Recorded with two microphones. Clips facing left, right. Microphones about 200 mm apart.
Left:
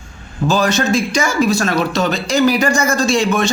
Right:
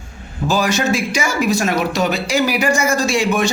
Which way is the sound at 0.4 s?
10° right (ahead or behind).